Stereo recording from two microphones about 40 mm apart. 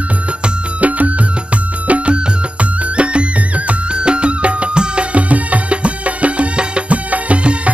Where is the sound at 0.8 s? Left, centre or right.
Right.